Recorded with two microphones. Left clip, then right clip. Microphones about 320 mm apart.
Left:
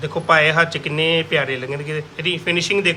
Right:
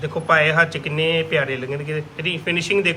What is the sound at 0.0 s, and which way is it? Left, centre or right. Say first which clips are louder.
A man's voice: left 2 dB; centre.